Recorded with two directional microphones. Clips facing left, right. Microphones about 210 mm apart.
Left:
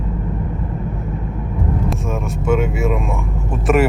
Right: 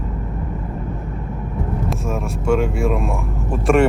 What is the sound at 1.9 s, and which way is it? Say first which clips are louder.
Speech: left 1 dB; centre (ahead or behind).